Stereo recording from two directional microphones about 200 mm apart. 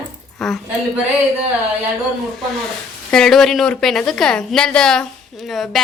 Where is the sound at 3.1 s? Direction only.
Centre (ahead or behind).